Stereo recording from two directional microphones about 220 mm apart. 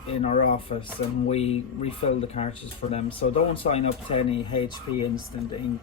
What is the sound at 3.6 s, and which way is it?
Speech, 25° left (ahead or behind).